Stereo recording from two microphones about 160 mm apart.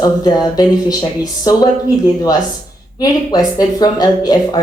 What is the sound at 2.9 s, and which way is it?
Speech, 25° left (ahead or behind).